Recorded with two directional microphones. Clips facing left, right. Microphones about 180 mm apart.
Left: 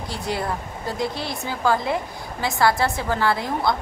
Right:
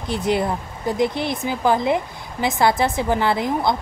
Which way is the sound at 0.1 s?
20° right (ahead or behind).